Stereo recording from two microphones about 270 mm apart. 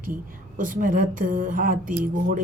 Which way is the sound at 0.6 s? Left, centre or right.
Right.